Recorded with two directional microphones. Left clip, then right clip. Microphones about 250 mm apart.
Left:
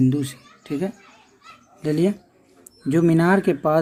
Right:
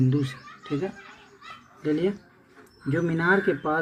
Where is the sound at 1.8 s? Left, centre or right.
Left.